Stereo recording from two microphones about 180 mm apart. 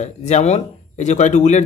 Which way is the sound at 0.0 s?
40° left (ahead or behind).